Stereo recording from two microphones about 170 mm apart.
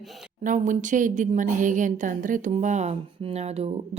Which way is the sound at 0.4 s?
50° right (ahead or behind).